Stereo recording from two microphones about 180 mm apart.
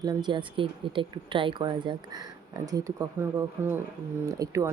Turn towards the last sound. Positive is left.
turn(degrees=-15)  # may be behind; listen again after turning